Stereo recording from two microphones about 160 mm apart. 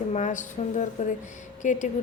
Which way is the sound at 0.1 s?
50° left (ahead or behind).